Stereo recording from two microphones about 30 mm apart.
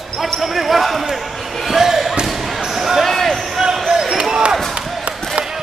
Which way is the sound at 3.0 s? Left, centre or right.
Centre.